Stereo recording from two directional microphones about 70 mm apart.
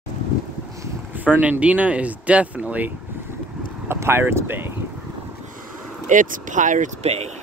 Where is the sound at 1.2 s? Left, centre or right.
Right.